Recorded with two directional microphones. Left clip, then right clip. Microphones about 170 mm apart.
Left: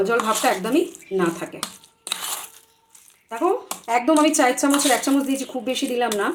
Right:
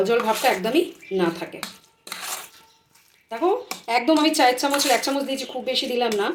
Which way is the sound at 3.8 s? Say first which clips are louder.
Left 2 dB; 60° left (ahead or behind).